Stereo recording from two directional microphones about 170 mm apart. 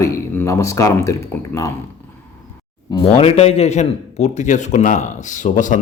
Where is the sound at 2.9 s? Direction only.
30° left (ahead or behind).